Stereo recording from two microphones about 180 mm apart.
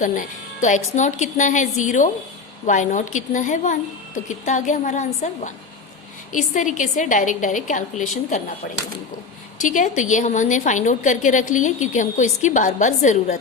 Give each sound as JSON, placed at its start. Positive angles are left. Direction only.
{"t": 0.0, "sound": "a woman's voice", "side_deg": 45}
{"t": 9.6, "sound": "a woman's voice", "side_deg": 45}